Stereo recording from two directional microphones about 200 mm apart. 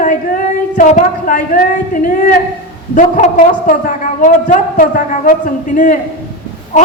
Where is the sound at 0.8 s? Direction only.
40° left (ahead or behind).